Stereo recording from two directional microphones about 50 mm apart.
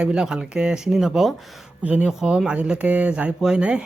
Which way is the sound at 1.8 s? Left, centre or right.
Right.